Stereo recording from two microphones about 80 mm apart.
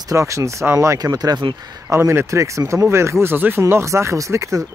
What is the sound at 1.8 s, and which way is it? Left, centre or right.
Speech, right.